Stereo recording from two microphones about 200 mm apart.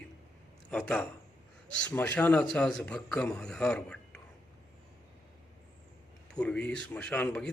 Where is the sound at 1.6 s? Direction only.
5° left (ahead or behind).